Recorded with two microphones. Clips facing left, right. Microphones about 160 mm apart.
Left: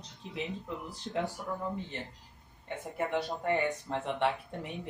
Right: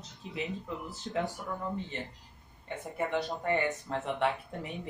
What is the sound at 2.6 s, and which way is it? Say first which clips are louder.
Speech: even; centre (ahead or behind).